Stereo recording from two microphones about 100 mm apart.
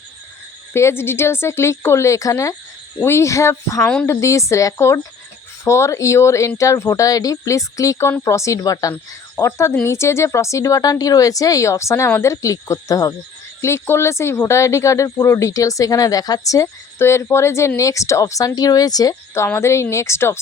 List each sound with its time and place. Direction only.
0.7 s speech: 25° left (ahead or behind)
3.8 s a woman's voice: 10° left (ahead or behind)
4.0 s speech: 30° left (ahead or behind)
19.5 s speech: 30° left (ahead or behind)